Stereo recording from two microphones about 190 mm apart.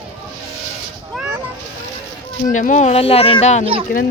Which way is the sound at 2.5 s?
40° left (ahead or behind).